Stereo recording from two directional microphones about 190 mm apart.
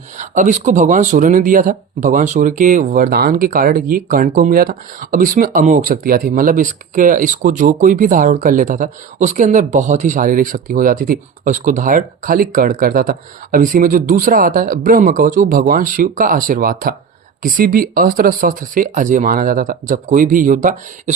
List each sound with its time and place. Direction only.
0.2 s speech: 40° right (ahead or behind)